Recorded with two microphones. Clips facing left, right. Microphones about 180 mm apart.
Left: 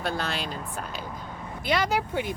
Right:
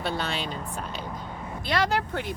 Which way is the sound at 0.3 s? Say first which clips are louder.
Even; centre (ahead or behind).